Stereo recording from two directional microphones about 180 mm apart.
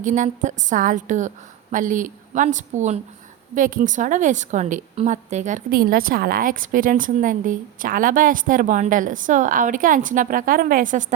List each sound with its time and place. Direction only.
0.0 s a woman's voice: 45° right (ahead or behind)